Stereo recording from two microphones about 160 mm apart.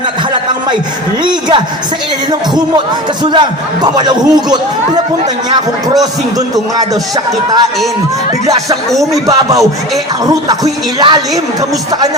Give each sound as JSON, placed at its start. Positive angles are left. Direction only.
{"t": 1.2, "sound": "speech", "side_deg": -30}
{"t": 3.2, "sound": "speech", "side_deg": -25}
{"t": 9.2, "sound": "speech", "side_deg": -20}